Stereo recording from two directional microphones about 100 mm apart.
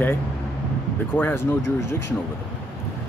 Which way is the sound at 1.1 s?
20° left (ahead or behind).